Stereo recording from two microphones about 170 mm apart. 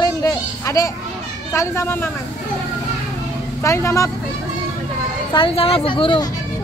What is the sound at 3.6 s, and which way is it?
Speech, 15° left (ahead or behind).